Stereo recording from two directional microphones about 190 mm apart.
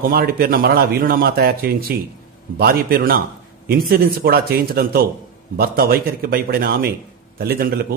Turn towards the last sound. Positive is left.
turn(degrees=-50)  # may be behind; listen again after turning